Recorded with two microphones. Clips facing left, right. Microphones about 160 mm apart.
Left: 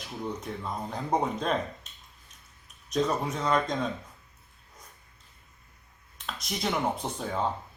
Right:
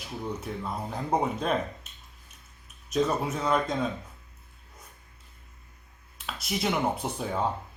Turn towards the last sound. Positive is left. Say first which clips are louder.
# right 1 dB
turn(degrees=-5)  # may be behind; listen again after turning